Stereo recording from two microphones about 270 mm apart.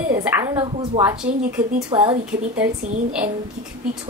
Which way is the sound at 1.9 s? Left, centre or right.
Centre.